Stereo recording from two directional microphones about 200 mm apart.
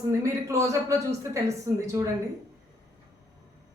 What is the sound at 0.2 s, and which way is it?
A woman's voice, 15° right (ahead or behind).